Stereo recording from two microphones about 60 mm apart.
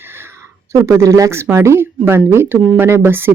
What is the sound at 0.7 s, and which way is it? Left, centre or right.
Speech, right.